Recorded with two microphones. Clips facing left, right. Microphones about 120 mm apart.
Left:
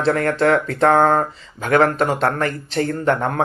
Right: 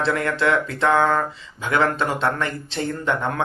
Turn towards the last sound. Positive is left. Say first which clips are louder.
# left 4 dB
turn(degrees=40)  # may be behind; listen again after turning